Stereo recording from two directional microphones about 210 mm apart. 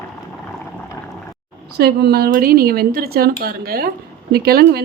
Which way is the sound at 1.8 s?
50° right (ahead or behind).